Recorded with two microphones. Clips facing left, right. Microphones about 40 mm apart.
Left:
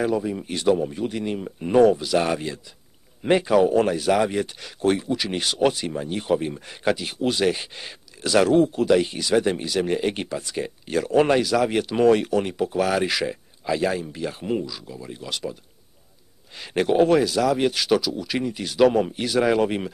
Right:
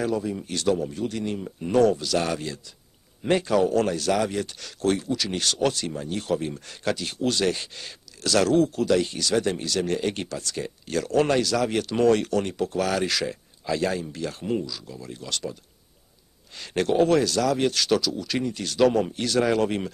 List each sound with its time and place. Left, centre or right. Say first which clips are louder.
0.0 s speech: left 3 dB; centre
16.5 s speech: left 2 dB; centre